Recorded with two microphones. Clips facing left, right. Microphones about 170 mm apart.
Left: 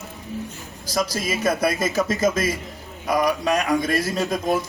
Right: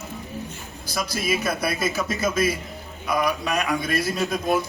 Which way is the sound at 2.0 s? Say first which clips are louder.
Left 4 dB; 40° left (ahead or behind).